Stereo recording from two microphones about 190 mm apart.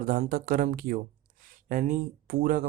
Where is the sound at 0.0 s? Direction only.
50° right (ahead or behind).